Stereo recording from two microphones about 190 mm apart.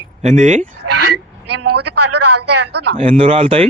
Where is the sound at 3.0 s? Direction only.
30° right (ahead or behind).